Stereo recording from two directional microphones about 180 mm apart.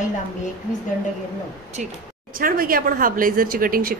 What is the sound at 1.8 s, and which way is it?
A woman's voice, 45° right (ahead or behind).